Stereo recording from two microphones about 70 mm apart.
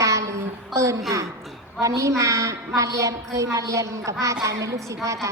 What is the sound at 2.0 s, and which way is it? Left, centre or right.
A woman's voice, right.